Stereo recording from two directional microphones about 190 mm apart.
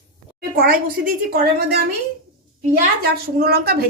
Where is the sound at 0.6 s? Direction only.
50° right (ahead or behind).